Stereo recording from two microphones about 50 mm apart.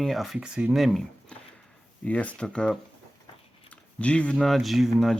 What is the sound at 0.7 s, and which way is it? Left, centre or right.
Speech, centre.